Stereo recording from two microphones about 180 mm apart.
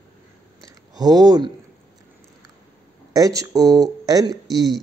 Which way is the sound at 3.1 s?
20° right (ahead or behind).